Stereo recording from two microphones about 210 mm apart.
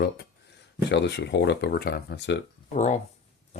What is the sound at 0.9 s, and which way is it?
Speech, 55° left (ahead or behind).